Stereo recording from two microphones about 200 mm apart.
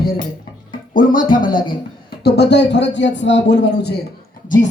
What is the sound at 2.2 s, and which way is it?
A man's voice, 55° left (ahead or behind).